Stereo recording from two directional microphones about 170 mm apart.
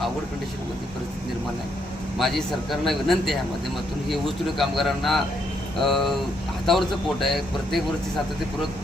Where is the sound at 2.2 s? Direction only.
Centre (ahead or behind).